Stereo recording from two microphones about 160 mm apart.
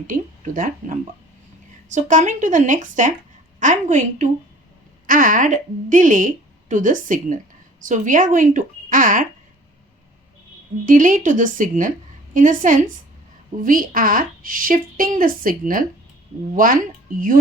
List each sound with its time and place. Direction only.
0.1 s a woman's voice: 55° right (ahead or behind)
10.8 s a woman's voice: 55° right (ahead or behind)